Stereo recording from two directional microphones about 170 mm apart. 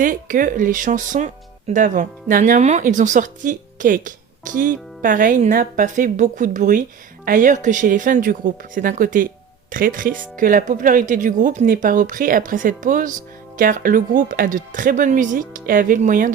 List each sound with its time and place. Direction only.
0.0 s speech: 50° right (ahead or behind)